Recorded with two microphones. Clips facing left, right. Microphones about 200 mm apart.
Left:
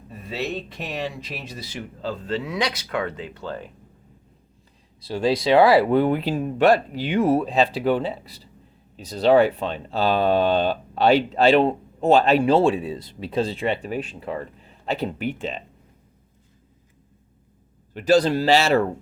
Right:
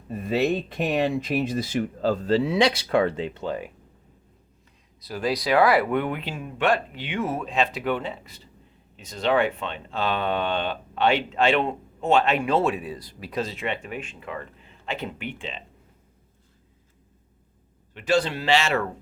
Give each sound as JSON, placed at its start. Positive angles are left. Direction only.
{"t": 0.1, "sound": "speech", "side_deg": -50}
{"t": 4.9, "sound": "speech", "side_deg": 30}
{"t": 17.9, "sound": "speech", "side_deg": 40}